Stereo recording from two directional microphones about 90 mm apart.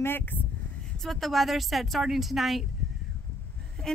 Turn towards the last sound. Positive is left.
turn(degrees=5)  # may be behind; listen again after turning